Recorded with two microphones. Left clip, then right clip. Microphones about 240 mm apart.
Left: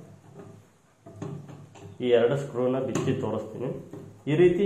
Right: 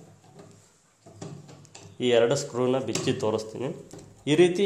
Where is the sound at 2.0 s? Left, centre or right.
Right.